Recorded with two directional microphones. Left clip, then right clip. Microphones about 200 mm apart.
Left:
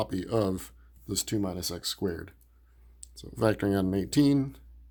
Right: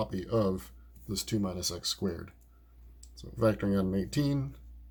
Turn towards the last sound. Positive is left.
turn(degrees=55)  # may be behind; listen again after turning